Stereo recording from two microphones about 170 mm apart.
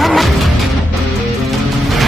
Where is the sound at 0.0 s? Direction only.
Centre (ahead or behind).